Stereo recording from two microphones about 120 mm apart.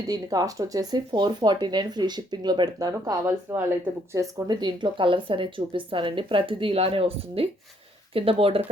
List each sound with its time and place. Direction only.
0.1 s speech: 30° right (ahead or behind); by 8.7 s 50° right (ahead or behind)